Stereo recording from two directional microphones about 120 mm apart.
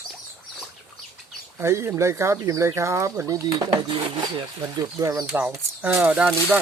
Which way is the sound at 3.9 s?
40° right (ahead or behind).